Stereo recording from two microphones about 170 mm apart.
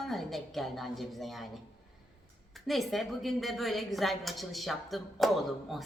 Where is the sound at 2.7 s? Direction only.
Centre (ahead or behind).